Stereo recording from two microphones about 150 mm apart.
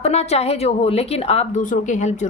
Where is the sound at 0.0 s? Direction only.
45° left (ahead or behind).